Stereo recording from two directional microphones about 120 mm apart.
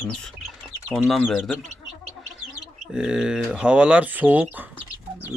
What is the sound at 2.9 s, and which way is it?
Speech, 5° right (ahead or behind).